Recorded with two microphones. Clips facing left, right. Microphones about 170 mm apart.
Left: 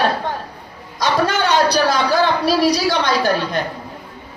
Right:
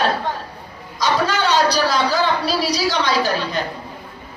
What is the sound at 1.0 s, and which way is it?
A woman's voice, 55° left (ahead or behind).